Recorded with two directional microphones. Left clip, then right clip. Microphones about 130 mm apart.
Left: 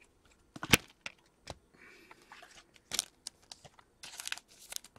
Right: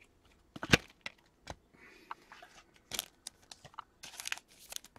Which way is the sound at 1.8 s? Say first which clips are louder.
Left 1 dB; centre (ahead or behind).